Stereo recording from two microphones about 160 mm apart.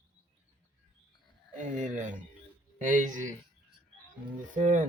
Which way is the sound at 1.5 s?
50° right (ahead or behind).